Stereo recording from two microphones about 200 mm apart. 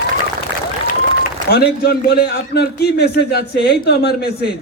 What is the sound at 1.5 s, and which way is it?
A man's voice, 55° left (ahead or behind).